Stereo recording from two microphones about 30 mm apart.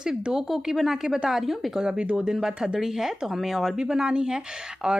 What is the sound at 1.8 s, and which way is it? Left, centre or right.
A woman's voice, right.